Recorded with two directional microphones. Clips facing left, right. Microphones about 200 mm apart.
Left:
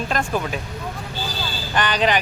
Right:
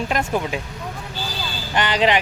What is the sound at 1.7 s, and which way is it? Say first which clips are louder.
Speech: right 1 dB; 25° right (ahead or behind).